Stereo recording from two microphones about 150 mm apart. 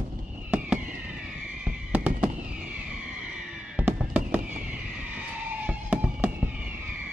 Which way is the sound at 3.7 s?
10° right (ahead or behind).